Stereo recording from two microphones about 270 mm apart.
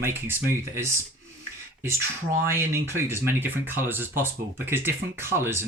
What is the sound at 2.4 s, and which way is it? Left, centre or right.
Speech, centre.